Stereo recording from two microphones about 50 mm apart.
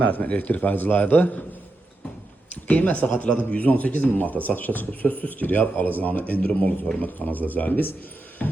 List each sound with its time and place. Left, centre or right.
0.0 s speech: left
2.6 s speech: left